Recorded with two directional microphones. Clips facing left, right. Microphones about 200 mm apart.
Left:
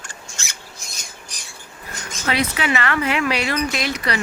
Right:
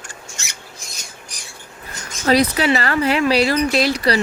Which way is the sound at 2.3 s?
35° right (ahead or behind).